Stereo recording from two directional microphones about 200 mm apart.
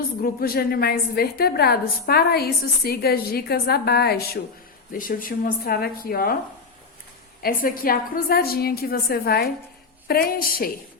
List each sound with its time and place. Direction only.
0.2 s a woman's voice: 45° left (ahead or behind)
7.4 s a woman's voice: 45° left (ahead or behind)